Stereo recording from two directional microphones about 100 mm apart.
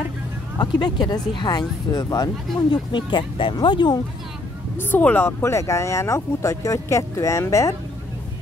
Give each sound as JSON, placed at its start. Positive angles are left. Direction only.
{"t": 0.6, "sound": "speech", "side_deg": 45}
{"t": 4.7, "sound": "speech", "side_deg": 20}